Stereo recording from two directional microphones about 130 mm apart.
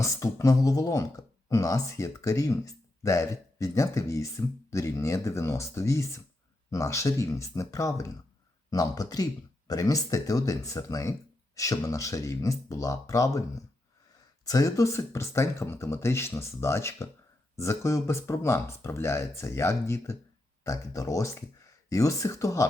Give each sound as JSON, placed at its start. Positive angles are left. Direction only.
{"t": 0.0, "sound": "speech", "side_deg": 25}